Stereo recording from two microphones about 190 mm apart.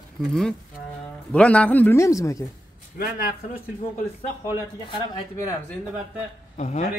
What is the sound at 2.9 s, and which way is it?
Speech, 50° left (ahead or behind).